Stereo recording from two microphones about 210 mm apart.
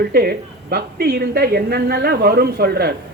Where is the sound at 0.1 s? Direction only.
50° right (ahead or behind).